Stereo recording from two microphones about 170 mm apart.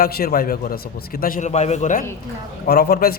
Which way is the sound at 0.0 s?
60° left (ahead or behind).